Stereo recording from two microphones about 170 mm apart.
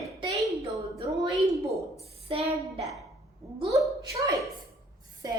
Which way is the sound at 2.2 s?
35° right (ahead or behind).